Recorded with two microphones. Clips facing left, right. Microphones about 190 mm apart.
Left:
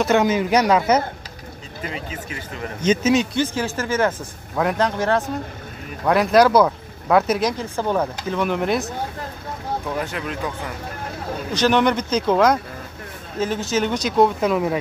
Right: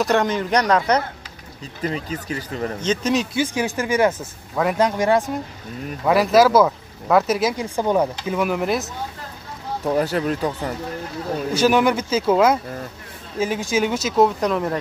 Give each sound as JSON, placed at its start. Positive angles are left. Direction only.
{"t": 0.0, "sound": "a man's voice", "side_deg": 5}
{"t": 1.8, "sound": "speech", "side_deg": -40}
{"t": 2.8, "sound": "speech", "side_deg": 5}
{"t": 3.3, "sound": "speech", "side_deg": -15}
{"t": 7.7, "sound": "speech", "side_deg": -15}
{"t": 9.9, "sound": "speech", "side_deg": -40}
{"t": 11.5, "sound": "speech", "side_deg": -10}